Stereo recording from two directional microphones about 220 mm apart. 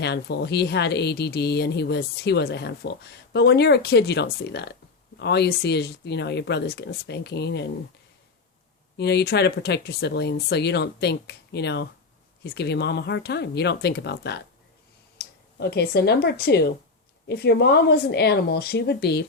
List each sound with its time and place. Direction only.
0.0 s speech: 50° left (ahead or behind)
9.0 s speech: 50° left (ahead or behind)